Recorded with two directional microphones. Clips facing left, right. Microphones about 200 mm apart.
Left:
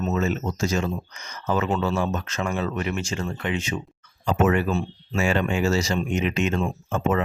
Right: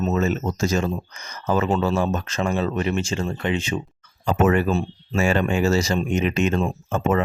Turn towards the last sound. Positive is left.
turn(degrees=-40)  # may be behind; listen again after turning